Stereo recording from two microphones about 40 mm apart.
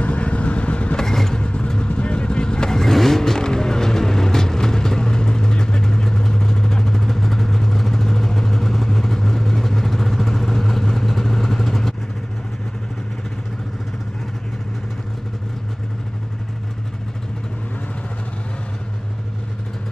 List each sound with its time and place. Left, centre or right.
0.0 s vehicle: left
0.9 s vehicle: centre
1.4 s vehicle: left; by 11.9 s centre